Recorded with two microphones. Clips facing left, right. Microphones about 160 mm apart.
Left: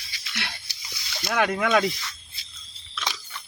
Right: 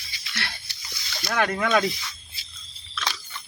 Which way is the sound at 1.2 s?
10° left (ahead or behind).